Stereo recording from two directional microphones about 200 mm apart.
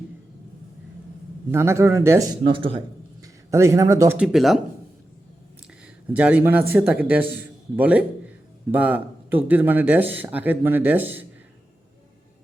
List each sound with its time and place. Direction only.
1.5 s speech: 15° right (ahead or behind)
2.5 s a man's voice: 25° right (ahead or behind)
3.5 s speech: 15° right (ahead or behind)
6.1 s speech: 5° right (ahead or behind)